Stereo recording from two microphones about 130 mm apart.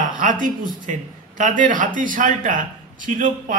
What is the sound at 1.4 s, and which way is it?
Speech, 90° right.